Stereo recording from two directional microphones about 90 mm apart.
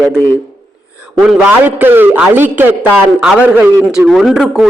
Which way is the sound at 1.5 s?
20° right (ahead or behind).